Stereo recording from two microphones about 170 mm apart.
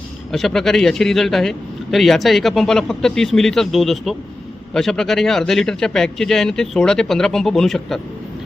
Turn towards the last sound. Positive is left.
turn(degrees=0)  # may be behind; listen again after turning